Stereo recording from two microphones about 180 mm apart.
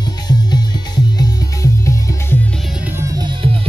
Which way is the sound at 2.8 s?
15° right (ahead or behind).